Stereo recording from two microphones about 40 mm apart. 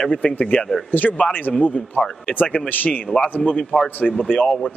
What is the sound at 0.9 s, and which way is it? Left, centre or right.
Speech, left.